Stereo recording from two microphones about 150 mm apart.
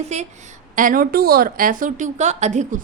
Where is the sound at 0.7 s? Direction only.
65° right (ahead or behind).